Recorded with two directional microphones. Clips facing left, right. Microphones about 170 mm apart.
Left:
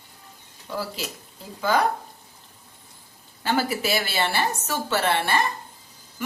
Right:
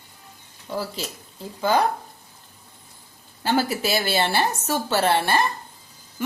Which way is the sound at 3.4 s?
30° right (ahead or behind).